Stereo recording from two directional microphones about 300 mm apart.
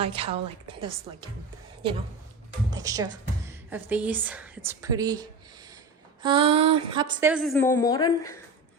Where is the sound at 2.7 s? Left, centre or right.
Centre.